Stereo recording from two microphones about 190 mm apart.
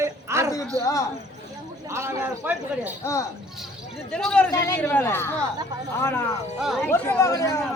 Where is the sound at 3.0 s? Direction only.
15° left (ahead or behind).